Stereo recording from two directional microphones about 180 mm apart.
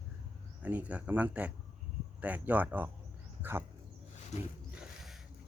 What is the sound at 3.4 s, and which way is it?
Dog, 10° right (ahead or behind).